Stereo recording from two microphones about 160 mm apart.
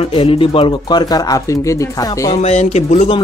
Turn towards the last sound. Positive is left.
turn(degrees=45)  # may be behind; listen again after turning